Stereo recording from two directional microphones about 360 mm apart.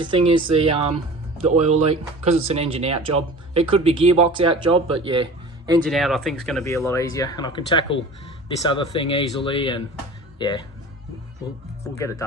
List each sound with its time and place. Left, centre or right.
0.0 s speech: centre
5.9 s speech: centre
11.9 s speech: centre